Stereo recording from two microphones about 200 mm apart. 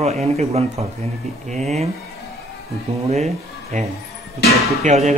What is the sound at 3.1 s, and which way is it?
Speech, 35° right (ahead or behind).